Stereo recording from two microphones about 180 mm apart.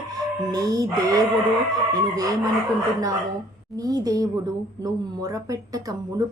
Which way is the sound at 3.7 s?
20° right (ahead or behind).